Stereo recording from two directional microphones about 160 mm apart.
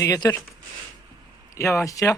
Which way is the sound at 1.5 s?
15° left (ahead or behind).